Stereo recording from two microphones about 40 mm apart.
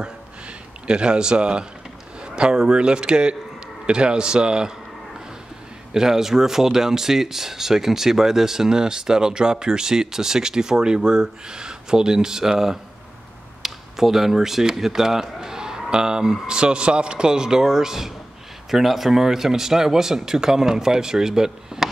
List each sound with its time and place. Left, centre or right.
0.8 s a man's voice: right
5.9 s speech: centre